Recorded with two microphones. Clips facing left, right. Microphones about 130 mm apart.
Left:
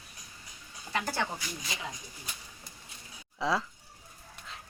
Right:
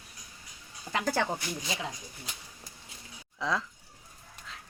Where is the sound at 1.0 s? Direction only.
90° right.